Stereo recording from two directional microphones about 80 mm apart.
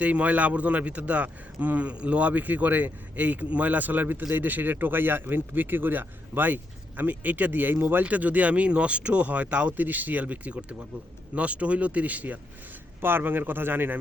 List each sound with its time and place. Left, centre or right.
0.0 s speech: centre